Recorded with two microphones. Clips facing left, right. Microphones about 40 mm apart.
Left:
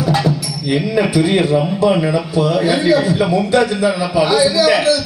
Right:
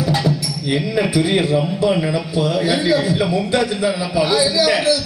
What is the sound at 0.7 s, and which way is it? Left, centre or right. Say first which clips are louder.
Speech: left 3 dB; centre.